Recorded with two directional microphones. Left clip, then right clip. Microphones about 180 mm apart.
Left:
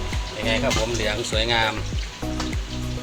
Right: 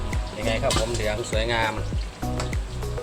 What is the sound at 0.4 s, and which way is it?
Speech, 20° left (ahead or behind).